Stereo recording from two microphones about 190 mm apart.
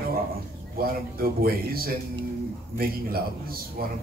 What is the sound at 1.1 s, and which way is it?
A man's voice, 50° right (ahead or behind).